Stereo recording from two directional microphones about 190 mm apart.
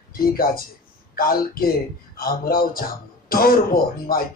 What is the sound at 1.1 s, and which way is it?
A man's voice, 50° left (ahead or behind).